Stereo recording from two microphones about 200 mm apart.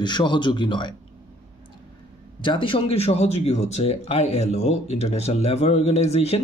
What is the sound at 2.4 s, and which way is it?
Speech, 25° left (ahead or behind).